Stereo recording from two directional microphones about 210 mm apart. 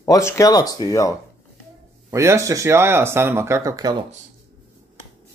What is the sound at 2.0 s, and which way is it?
Speech, 15° right (ahead or behind).